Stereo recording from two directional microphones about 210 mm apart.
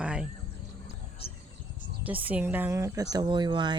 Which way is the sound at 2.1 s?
10° right (ahead or behind).